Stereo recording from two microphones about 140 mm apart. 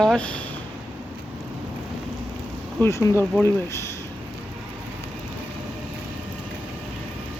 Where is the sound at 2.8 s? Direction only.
20° left (ahead or behind).